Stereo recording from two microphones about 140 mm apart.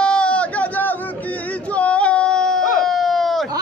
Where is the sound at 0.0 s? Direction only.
5° left (ahead or behind).